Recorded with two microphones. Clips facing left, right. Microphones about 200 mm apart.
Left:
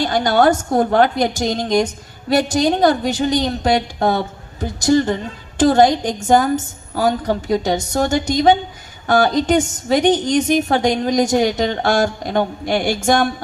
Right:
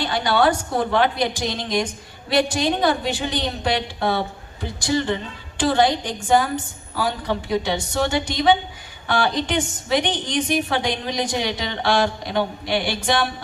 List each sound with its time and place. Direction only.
0.0 s a woman's voice: 45° left (ahead or behind)